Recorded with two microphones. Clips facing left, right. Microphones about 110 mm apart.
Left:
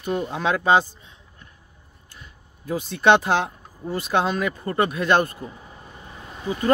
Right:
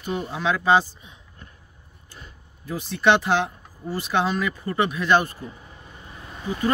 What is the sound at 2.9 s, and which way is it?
Speech, 50° left (ahead or behind).